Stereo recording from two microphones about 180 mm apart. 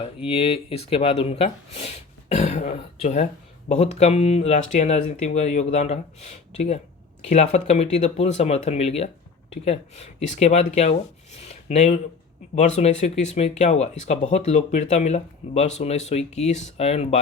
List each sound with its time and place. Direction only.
0.0 s speech: 30° left (ahead or behind)